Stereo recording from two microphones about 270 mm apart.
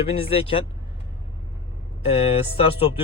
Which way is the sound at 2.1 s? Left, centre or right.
Left.